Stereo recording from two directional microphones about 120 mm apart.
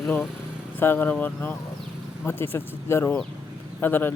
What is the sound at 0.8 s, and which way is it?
A man's voice, 15° left (ahead or behind).